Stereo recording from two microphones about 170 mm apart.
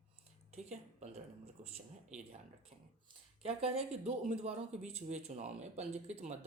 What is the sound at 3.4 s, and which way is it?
Speech, 35° right (ahead or behind).